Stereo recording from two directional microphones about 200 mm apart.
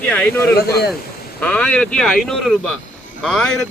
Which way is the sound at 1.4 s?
5° left (ahead or behind).